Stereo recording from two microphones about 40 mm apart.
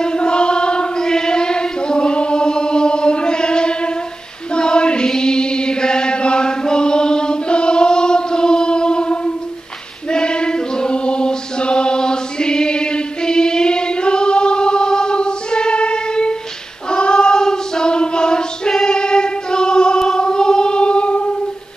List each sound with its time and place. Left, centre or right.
0.0 s child singing: left
4.6 s choir: left
16.9 s child singing: left